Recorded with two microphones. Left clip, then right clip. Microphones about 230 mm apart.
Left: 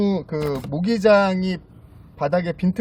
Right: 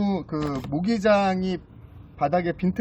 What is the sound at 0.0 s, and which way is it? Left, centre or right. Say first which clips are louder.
Speech: left 5 dB; left.